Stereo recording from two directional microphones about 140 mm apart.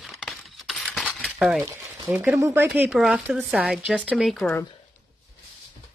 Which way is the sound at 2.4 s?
20° right (ahead or behind).